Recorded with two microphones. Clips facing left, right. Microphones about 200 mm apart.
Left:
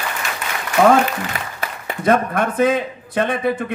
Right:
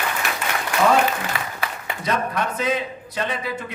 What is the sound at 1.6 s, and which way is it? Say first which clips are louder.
A man's voice: left 11 dB; 50° left (ahead or behind).